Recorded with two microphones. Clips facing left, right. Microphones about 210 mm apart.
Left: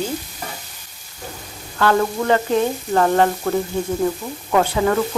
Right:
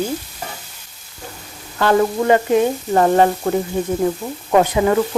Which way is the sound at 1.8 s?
15° right (ahead or behind).